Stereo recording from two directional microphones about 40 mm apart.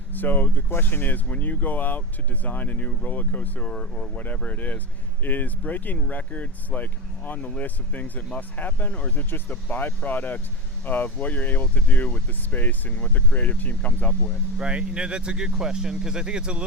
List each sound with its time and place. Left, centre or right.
0.1 s speech: left
3.7 s speech: centre
4.4 s speech: left
8.9 s speech: left
9.1 s speech: left
14.6 s speech: right